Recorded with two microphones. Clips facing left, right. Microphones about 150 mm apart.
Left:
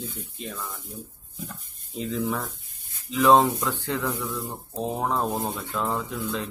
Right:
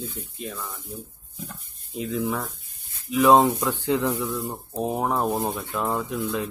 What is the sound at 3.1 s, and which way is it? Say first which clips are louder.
Speech: right 2 dB; 15° right (ahead or behind).